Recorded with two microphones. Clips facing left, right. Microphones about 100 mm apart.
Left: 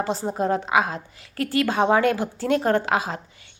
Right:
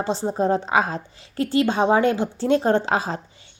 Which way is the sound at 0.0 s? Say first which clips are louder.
Right 2 dB; 25° right (ahead or behind).